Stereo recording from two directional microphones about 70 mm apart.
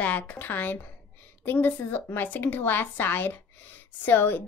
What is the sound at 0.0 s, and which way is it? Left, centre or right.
A woman's voice, left.